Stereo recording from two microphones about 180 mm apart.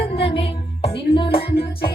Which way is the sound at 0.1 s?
30° left (ahead or behind).